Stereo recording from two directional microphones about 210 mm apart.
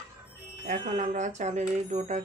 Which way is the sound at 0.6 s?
35° right (ahead or behind).